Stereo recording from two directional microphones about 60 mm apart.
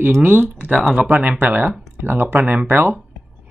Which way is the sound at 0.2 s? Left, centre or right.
Right.